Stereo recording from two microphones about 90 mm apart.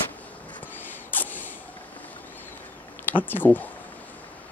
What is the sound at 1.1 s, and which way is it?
Spray, 20° left (ahead or behind).